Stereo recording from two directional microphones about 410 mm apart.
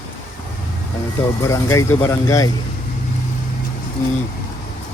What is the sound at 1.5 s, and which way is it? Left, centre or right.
Speech, centre.